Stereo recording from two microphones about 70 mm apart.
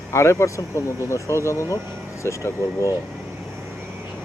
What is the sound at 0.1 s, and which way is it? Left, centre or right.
Speech, left.